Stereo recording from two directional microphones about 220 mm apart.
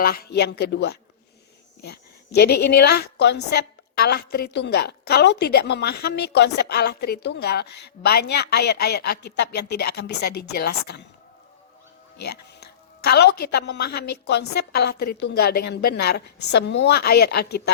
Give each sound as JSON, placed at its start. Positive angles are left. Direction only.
{"t": 0.0, "sound": "a woman's voice", "side_deg": 45}
{"t": 12.2, "sound": "a woman's voice", "side_deg": 50}